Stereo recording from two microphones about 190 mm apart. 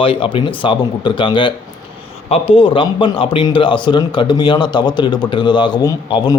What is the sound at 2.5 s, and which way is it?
A man's voice, 25° left (ahead or behind).